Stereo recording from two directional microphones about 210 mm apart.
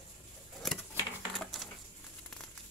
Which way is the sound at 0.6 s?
Centre (ahead or behind).